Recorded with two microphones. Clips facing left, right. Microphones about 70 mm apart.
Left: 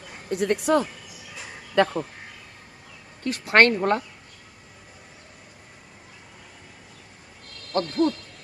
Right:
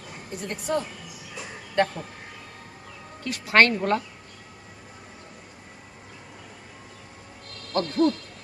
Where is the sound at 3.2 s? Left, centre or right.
Left.